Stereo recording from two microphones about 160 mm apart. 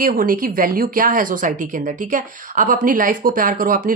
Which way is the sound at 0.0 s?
60° right (ahead or behind).